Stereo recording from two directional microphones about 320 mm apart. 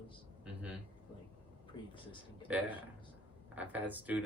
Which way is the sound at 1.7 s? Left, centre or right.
Centre.